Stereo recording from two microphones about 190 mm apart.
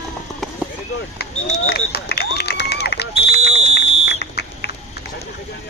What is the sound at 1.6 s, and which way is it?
Run, 55° left (ahead or behind).